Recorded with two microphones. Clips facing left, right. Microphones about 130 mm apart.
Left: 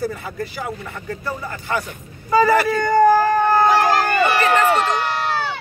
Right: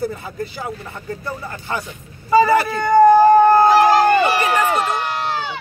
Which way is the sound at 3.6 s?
20° right (ahead or behind).